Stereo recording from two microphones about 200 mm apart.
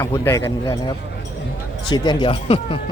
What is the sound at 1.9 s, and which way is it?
Speech, 20° left (ahead or behind).